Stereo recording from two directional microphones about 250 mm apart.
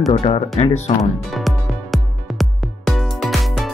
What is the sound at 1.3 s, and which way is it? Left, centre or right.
Music, centre.